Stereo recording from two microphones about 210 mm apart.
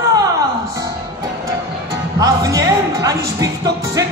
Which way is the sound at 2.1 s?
15° right (ahead or behind).